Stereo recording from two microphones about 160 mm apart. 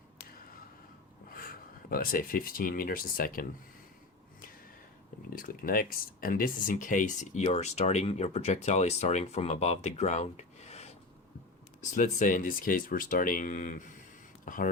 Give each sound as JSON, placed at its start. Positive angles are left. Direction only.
{"t": 1.3, "sound": "speech", "side_deg": 65}
{"t": 5.3, "sound": "speech", "side_deg": 65}
{"t": 11.9, "sound": "speech", "side_deg": 50}